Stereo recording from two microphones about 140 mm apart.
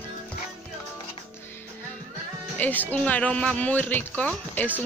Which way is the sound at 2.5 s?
10° left (ahead or behind).